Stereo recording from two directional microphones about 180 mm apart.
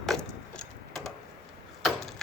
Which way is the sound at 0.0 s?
5° left (ahead or behind).